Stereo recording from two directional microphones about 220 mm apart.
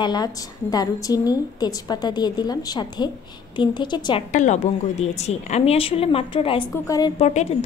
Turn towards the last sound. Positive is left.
turn(degrees=30)  # may be behind; listen again after turning